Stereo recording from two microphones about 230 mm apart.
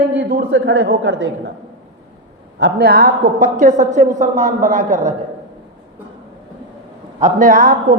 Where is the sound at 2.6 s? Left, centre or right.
Right.